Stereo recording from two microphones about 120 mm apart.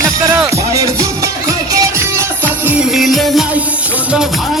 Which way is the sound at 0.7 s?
25° right (ahead or behind).